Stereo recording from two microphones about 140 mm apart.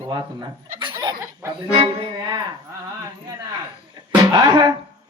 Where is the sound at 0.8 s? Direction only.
35° right (ahead or behind).